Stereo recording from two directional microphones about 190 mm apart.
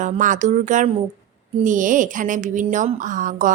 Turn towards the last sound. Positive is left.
turn(degrees=-45)  # may be behind; listen again after turning